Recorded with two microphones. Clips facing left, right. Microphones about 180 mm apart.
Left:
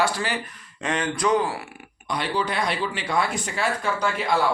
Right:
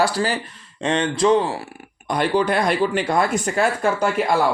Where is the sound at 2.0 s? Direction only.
50° right (ahead or behind).